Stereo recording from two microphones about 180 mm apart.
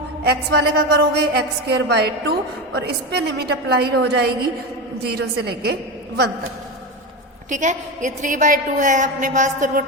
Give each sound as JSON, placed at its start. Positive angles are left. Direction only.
{"t": 0.3, "sound": "a woman's voice", "side_deg": -65}
{"t": 7.5, "sound": "a woman's voice", "side_deg": -45}